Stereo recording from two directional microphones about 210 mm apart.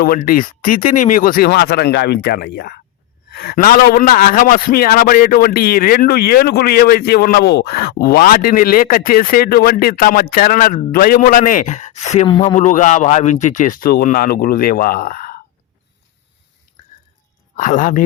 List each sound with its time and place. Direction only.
0.0 s a man's voice: 40° left (ahead or behind)
17.6 s speech: 40° left (ahead or behind)